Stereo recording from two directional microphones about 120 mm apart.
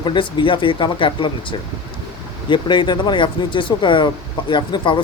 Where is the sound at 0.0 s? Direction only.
40° left (ahead or behind).